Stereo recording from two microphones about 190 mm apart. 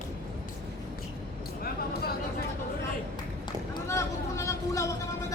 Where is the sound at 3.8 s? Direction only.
15° left (ahead or behind).